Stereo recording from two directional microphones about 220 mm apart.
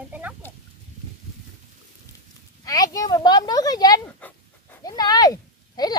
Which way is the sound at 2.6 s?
15° left (ahead or behind).